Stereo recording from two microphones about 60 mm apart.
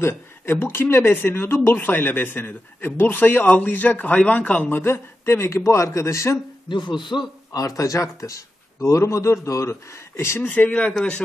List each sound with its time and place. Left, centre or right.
0.0 s speech: left
7.1 s a man's voice: left
7.5 s a man's voice: left
10.4 s speech: left